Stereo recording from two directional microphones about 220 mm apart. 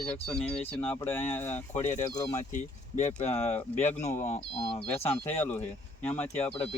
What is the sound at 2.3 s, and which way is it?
Speech, 35° left (ahead or behind).